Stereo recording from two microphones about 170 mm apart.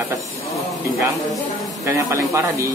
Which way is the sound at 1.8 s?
15° right (ahead or behind).